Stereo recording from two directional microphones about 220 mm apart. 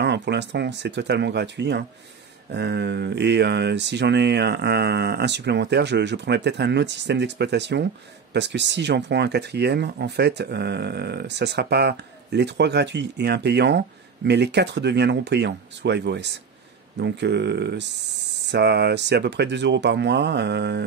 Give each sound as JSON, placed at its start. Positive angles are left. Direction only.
{"t": 0.0, "sound": "speech", "side_deg": -50}